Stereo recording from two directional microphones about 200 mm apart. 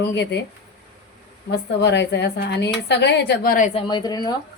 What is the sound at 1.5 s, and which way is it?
A woman's voice, 55° left (ahead or behind).